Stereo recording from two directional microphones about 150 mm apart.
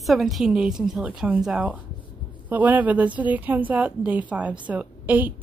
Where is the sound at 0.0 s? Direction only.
Centre (ahead or behind).